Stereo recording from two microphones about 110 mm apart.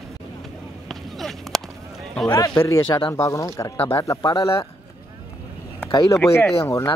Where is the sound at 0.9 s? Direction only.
Centre (ahead or behind).